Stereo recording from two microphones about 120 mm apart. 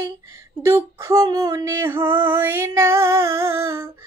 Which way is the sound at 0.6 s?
25° right (ahead or behind).